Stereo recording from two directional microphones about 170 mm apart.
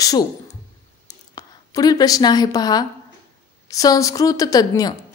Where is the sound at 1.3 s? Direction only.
20° left (ahead or behind).